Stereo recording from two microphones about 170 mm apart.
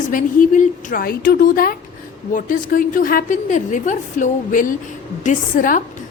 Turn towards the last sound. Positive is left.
turn(degrees=50)  # may be behind; listen again after turning